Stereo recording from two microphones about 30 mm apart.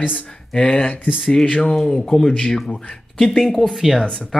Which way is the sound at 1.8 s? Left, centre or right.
Left.